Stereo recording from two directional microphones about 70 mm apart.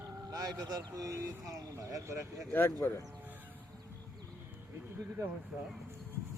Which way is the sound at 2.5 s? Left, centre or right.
Left.